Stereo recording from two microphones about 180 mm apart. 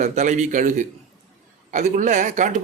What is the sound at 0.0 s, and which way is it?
A man's voice, 40° right (ahead or behind).